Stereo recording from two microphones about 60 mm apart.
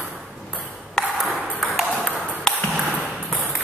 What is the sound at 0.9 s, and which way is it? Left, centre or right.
Ping, centre.